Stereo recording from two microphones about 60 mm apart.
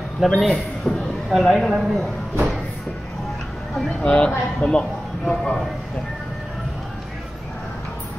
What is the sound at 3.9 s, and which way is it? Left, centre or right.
A man's voice, centre.